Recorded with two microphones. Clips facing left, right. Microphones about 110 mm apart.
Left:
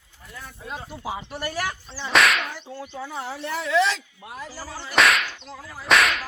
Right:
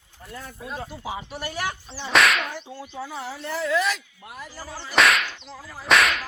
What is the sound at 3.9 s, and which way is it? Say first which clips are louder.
Speech: even; 25° left (ahead or behind).